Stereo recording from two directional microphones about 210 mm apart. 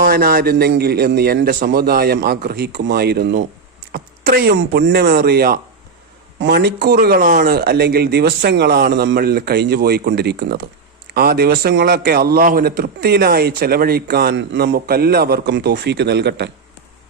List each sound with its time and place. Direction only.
0.0 s a man's voice: 45° right (ahead or behind)